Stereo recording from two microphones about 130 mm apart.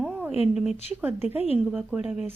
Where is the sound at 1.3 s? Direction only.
50° left (ahead or behind).